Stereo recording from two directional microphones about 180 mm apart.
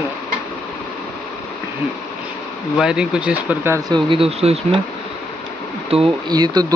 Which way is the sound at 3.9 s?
30° right (ahead or behind).